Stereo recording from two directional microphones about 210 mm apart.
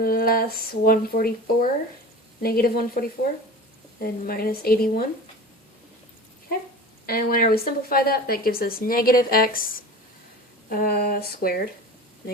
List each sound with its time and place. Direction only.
0.0 s speech: 45° left (ahead or behind)
4.0 s speech: 45° left (ahead or behind)
7.0 s speech: 45° left (ahead or behind)